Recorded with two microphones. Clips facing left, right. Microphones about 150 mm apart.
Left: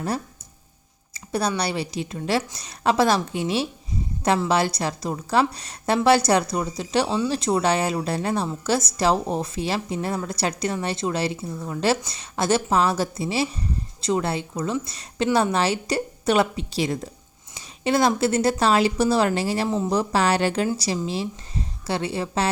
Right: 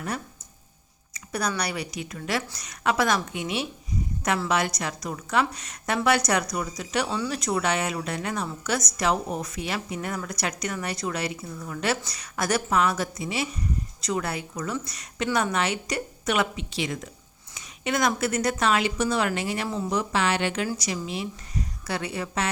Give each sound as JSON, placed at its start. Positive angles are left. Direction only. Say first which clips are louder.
{"t": 1.1, "sound": "a woman's voice", "louder": "left 4 dB", "side_deg": 30}
{"t": 19.6, "sound": "speech", "louder": "left 5 dB", "side_deg": 20}
{"t": 19.9, "sound": "a woman's voice", "louder": "left 3 dB", "side_deg": 35}